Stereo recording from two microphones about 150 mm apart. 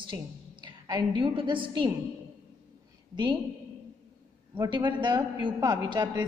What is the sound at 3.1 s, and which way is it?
Speech, 30° right (ahead or behind).